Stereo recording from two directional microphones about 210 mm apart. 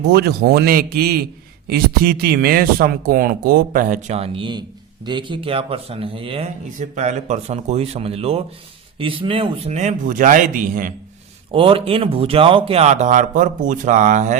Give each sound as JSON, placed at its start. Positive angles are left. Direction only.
{"t": 0.0, "sound": "a man's voice", "side_deg": -50}
{"t": 11.5, "sound": "speech", "side_deg": -25}